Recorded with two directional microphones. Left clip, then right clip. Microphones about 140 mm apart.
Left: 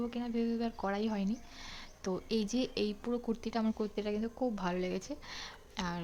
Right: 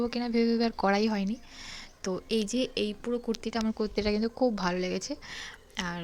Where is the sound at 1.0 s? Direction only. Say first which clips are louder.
Right 6 dB; 15° right (ahead or behind).